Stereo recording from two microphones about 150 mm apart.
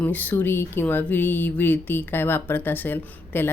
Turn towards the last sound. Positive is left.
turn(degrees=15)  # may be behind; listen again after turning